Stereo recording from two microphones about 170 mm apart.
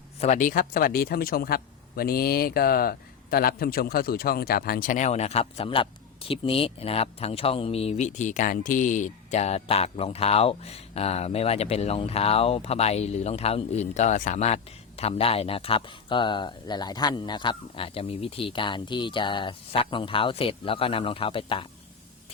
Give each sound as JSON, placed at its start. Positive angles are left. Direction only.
{"t": 0.2, "sound": "speech", "side_deg": 45}